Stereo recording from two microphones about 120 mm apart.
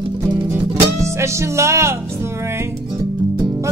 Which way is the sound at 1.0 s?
25° right (ahead or behind).